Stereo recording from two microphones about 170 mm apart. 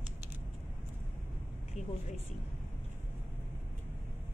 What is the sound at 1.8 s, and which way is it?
Speech, 40° left (ahead or behind).